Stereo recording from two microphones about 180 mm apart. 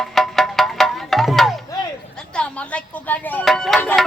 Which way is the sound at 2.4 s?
10° left (ahead or behind).